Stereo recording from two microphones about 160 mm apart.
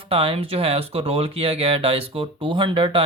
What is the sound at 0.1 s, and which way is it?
Speech, 35° right (ahead or behind).